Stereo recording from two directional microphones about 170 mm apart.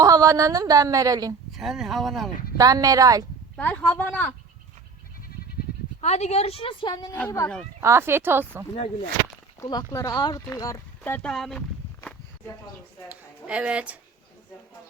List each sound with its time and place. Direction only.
0.0 s a woman's voice: 20° right (ahead or behind)
1.5 s speech: centre (ahead or behind)
2.6 s a woman's voice: 20° right (ahead or behind)
3.6 s speech: 10° left (ahead or behind)
6.0 s a woman's voice: 40° left (ahead or behind); by 7.5 s 20° left (ahead or behind)
7.8 s speech: 15° right (ahead or behind)
8.7 s a woman's voice: 35° left (ahead or behind)
9.6 s speech: 20° left (ahead or behind); by 11.6 s centre (ahead or behind)
13.1 s speech: 5° right (ahead or behind)